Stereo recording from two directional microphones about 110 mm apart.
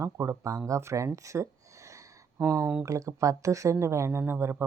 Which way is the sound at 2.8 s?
30° right (ahead or behind).